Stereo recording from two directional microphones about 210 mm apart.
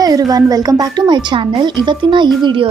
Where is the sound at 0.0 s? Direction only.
15° right (ahead or behind).